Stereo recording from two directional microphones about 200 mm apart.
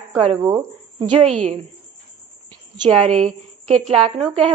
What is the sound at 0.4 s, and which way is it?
Speech, 20° right (ahead or behind).